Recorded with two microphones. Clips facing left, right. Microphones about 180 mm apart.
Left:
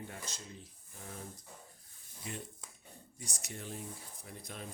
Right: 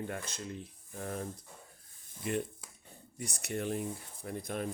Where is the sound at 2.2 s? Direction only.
60° right (ahead or behind).